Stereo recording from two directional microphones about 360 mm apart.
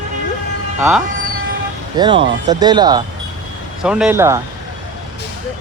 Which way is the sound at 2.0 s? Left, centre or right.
Centre.